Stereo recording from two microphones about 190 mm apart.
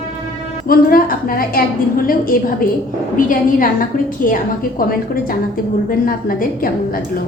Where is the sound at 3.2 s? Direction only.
45° left (ahead or behind).